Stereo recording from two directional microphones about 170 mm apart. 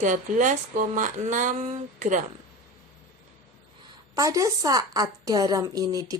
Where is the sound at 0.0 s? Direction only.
50° right (ahead or behind).